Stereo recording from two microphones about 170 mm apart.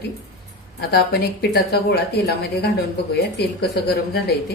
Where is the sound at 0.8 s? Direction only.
65° left (ahead or behind).